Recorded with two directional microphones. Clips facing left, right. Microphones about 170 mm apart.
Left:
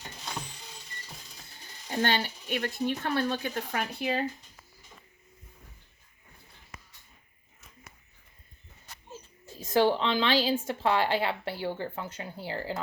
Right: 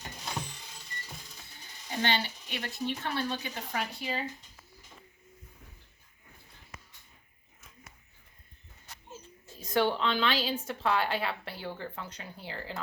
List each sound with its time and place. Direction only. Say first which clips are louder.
2.0 s a woman's voice: left 3 dB; 45° left (ahead or behind)
9.6 s speech: left 4 dB; 30° left (ahead or behind)